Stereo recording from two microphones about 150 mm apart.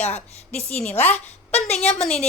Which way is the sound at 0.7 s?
10° left (ahead or behind).